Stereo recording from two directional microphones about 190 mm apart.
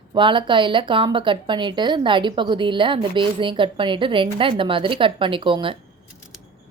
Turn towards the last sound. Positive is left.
turn(degrees=-25)  # may be behind; listen again after turning